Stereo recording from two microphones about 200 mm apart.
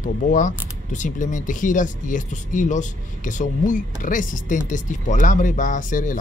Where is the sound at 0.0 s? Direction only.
40° left (ahead or behind).